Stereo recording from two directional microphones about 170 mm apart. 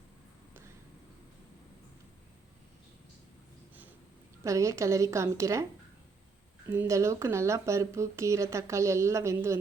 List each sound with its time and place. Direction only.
4.4 s speech: 20° right (ahead or behind)
6.7 s speech: 15° right (ahead or behind)